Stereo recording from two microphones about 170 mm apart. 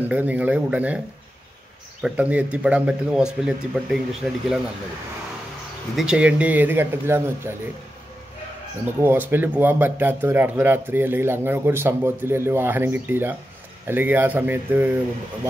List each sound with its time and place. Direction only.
0.0 s speech: 10° right (ahead or behind)
2.0 s speech: 10° right (ahead or behind)
5.9 s speech: 5° right (ahead or behind)
9.0 s speech: 10° right (ahead or behind)